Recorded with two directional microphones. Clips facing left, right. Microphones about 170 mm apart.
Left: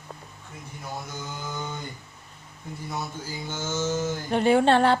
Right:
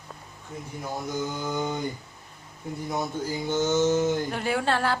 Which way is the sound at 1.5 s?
15° right (ahead or behind).